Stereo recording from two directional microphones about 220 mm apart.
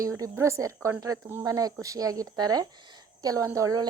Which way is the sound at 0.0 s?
15° right (ahead or behind).